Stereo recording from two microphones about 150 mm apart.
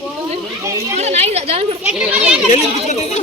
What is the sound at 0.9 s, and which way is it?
Speech, 45° right (ahead or behind).